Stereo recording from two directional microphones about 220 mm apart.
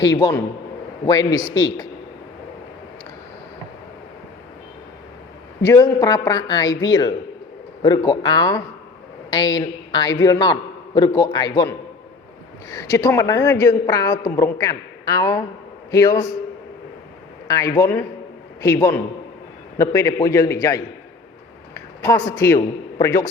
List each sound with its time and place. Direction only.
0.0 s a woman's voice: 20° left (ahead or behind)
5.6 s a woman's voice: 15° left (ahead or behind)
12.7 s a woman's voice: 15° left (ahead or behind)
17.5 s a woman's voice: 15° left (ahead or behind)